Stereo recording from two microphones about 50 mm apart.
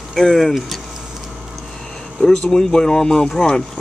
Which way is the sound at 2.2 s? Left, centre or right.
Centre.